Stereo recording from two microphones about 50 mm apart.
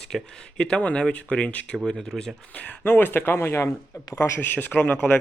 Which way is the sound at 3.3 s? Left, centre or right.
Left.